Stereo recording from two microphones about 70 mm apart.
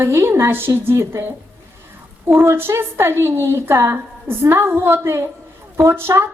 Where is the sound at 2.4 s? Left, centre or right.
Right.